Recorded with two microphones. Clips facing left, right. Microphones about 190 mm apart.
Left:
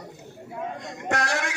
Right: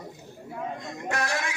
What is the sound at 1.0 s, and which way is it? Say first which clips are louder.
Speech: left 3 dB; 75° left (ahead or behind).